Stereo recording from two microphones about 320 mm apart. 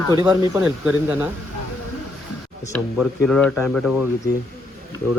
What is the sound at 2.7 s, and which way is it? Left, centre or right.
Speech, centre.